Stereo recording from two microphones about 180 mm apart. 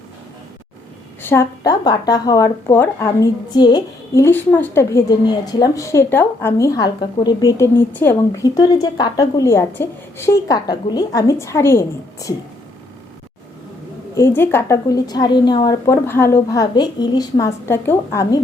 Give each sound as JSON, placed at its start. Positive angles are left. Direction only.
{"t": 1.2, "sound": "speech", "side_deg": 15}
{"t": 14.2, "sound": "a woman's voice", "side_deg": 10}